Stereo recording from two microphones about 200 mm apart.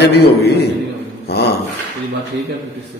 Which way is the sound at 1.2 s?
55° left (ahead or behind).